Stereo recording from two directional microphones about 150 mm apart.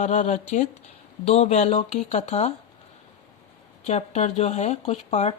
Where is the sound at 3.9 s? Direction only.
45° left (ahead or behind).